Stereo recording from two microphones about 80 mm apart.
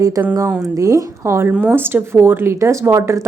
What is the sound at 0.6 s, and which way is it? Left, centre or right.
Speech, right.